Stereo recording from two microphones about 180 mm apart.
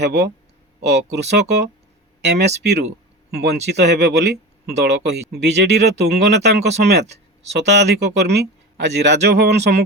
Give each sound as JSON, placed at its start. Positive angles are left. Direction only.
{"t": 0.0, "sound": "speech", "side_deg": -70}